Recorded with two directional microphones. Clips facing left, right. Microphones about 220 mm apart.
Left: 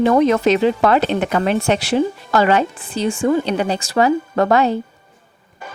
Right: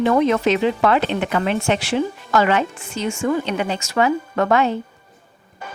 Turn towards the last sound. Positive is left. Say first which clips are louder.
# left 3 dB
turn(degrees=35)  # may be behind; listen again after turning